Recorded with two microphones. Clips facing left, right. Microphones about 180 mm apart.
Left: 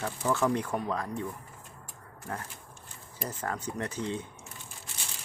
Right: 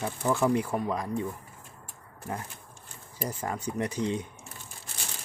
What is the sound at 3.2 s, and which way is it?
Speech, 10° right (ahead or behind).